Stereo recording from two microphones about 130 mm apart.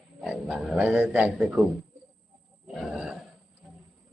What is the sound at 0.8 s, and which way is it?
Speech, 15° right (ahead or behind).